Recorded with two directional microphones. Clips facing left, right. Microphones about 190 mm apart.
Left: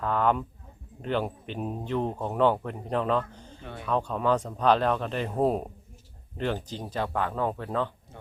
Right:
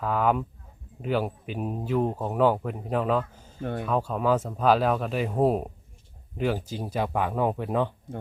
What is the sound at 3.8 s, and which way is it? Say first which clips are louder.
Speech: even; 5° right (ahead or behind).